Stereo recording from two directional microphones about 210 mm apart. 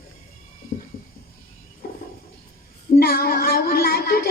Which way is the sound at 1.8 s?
45° left (ahead or behind).